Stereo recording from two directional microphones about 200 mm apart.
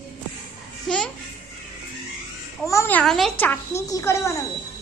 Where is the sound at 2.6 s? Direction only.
15° left (ahead or behind).